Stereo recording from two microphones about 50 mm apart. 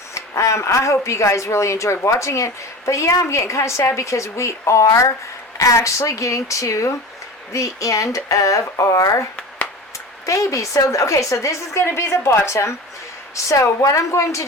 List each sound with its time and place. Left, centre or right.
0.1 s speech: left
1.0 s a woman's voice: left
10.2 s speech: left
11.9 s a woman's voice: left
13.3 s speech: left